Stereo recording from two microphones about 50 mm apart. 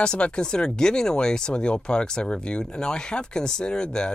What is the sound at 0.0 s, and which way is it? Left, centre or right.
Speech, centre.